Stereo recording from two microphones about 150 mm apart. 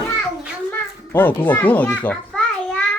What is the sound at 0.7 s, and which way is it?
A child's voice, 10° left (ahead or behind).